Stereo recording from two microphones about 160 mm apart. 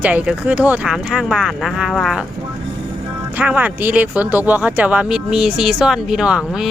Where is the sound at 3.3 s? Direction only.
10° right (ahead or behind).